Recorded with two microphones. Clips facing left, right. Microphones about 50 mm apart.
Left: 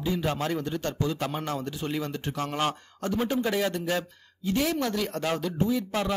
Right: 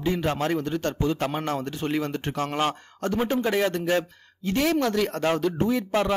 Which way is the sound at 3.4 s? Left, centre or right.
Right.